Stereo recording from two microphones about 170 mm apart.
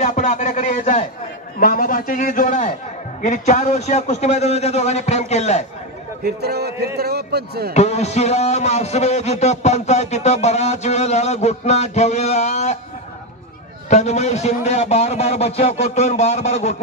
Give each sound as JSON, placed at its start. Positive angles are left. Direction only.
{"t": 0.0, "sound": "speech", "side_deg": 45}
{"t": 1.6, "sound": "a man's voice", "side_deg": 55}
{"t": 6.2, "sound": "a man's voice", "side_deg": -70}
{"t": 7.7, "sound": "a man's voice", "side_deg": 40}
{"t": 13.8, "sound": "a man's voice", "side_deg": 40}